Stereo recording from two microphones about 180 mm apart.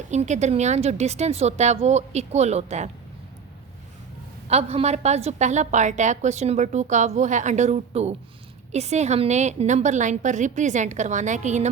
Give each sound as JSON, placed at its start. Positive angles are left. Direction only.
{"t": 0.1, "sound": "a woman's voice", "side_deg": -40}
{"t": 4.4, "sound": "a woman's voice", "side_deg": -35}